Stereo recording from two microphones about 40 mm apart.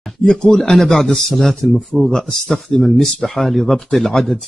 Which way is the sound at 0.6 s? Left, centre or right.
Centre.